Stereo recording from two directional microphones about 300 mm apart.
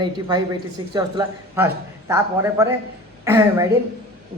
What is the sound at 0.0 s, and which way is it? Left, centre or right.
A man's voice, centre.